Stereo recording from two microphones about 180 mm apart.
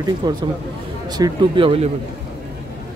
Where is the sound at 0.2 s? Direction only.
20° right (ahead or behind).